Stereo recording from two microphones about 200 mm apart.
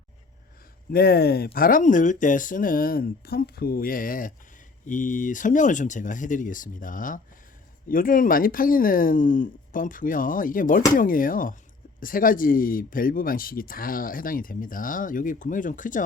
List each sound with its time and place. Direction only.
0.9 s speech: 50° left (ahead or behind)